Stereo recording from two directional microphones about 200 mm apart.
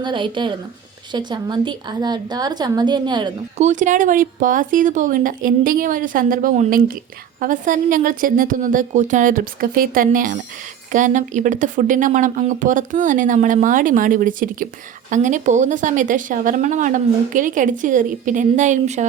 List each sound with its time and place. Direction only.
0.0 s a woman's voice: 25° right (ahead or behind)
3.6 s a woman's voice: 40° right (ahead or behind)